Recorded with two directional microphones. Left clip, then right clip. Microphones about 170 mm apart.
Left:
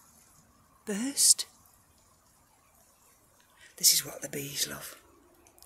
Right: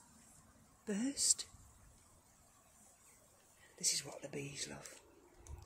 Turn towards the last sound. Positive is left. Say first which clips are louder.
# left 11 dB
turn(degrees=15)  # may be behind; listen again after turning